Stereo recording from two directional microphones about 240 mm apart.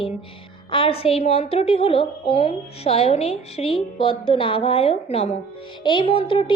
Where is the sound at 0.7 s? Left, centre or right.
Left.